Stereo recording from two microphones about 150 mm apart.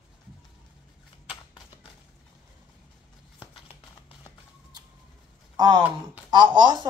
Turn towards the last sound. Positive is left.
turn(degrees=-30)  # may be behind; listen again after turning